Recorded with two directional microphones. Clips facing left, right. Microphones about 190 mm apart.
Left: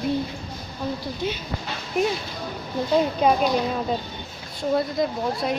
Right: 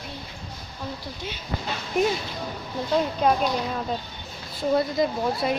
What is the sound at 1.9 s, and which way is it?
A woman's voice, centre (ahead or behind).